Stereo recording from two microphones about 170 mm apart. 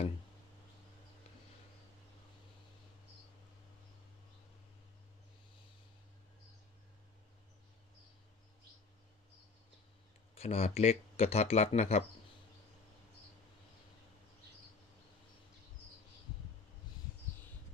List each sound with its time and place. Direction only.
10.3 s speech: 35° left (ahead or behind)